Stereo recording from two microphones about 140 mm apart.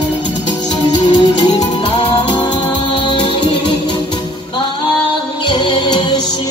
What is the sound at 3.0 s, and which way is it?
Music, 35° left (ahead or behind).